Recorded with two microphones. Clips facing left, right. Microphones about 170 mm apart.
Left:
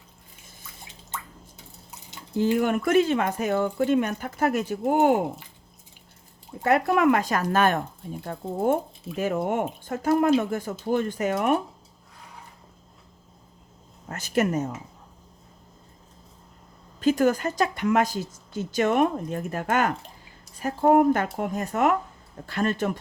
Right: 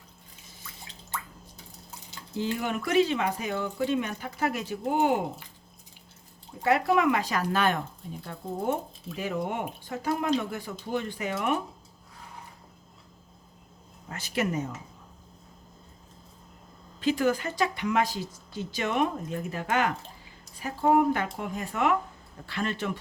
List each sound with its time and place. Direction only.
2.6 s speech: 50° left (ahead or behind)
6.7 s speech: 50° left (ahead or behind)
14.1 s speech: 45° left (ahead or behind)
17.0 s speech: 45° left (ahead or behind)